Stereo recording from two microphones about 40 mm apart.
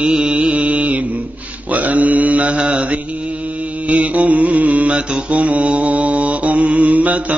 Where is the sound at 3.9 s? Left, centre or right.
Right.